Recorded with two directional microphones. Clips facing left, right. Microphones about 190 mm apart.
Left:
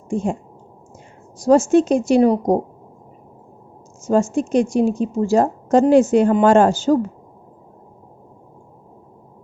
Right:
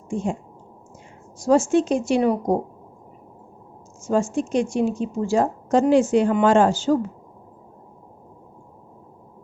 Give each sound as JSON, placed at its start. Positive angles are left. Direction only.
{"t": 1.4, "sound": "a woman's voice", "side_deg": 40}
{"t": 4.0, "sound": "a woman's voice", "side_deg": 45}